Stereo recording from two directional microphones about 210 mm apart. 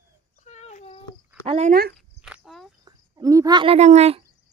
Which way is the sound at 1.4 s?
30° right (ahead or behind).